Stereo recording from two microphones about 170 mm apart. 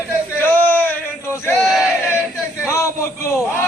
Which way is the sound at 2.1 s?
15° left (ahead or behind).